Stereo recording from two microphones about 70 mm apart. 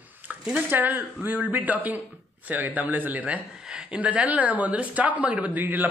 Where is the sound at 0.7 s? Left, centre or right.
Right.